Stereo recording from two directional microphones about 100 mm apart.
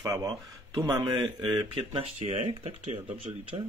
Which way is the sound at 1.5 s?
60° right (ahead or behind).